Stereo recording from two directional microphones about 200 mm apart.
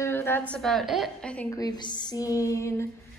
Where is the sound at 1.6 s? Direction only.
20° left (ahead or behind).